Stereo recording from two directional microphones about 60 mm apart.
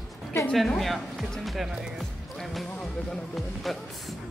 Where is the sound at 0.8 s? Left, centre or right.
Centre.